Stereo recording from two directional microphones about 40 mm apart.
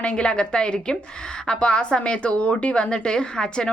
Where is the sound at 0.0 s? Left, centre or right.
Left.